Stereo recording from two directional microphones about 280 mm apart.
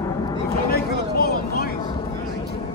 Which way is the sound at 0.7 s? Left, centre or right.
Left.